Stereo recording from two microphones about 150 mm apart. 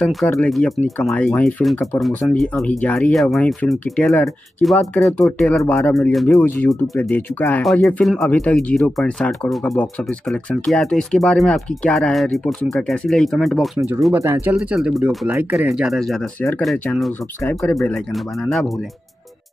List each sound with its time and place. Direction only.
0.0 s speech: 5° left (ahead or behind)
7.6 s speech: centre (ahead or behind)
13.7 s speech: 20° right (ahead or behind)
14.5 s speech: 5° right (ahead or behind)